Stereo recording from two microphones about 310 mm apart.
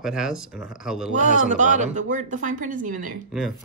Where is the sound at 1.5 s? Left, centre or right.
Right.